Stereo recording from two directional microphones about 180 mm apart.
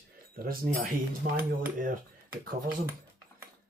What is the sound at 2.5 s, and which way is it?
Speech, 55° right (ahead or behind).